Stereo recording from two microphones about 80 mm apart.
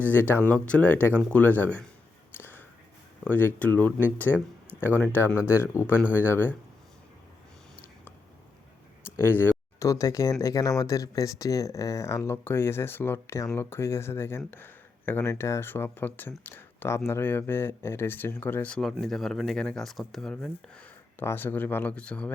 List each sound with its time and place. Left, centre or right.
0.0 s speech: left
2.4 s a sound: left
3.2 s speech: left
5.5 s speech: left
9.1 s speech: left
9.8 s speech: left
18.8 s speech: centre
20.3 s speech: centre
21.2 s speech: left